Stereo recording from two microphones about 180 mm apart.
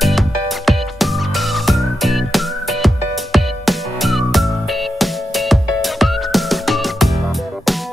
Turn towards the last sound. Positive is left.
turn(degrees=0)  # may be behind; listen again after turning